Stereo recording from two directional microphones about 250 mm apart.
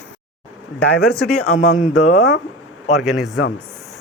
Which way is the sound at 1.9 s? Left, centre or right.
Left.